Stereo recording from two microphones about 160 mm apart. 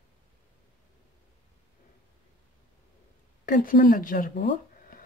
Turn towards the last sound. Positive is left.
turn(degrees=60)  # may be behind; listen again after turning